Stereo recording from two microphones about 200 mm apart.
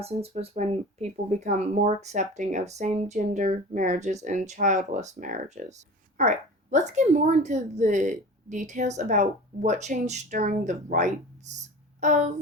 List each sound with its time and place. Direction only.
0.0 s speech: 30° right (ahead or behind)